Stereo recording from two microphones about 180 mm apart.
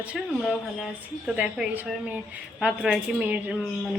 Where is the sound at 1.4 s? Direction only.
5° right (ahead or behind).